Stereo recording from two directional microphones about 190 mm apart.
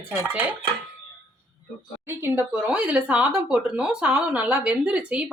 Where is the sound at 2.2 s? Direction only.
10° right (ahead or behind).